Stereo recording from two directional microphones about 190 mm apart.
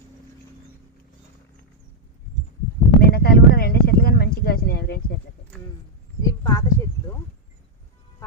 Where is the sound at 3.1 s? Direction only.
55° left (ahead or behind).